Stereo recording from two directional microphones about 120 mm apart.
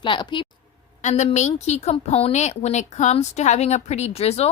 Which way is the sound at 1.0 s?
65° left (ahead or behind).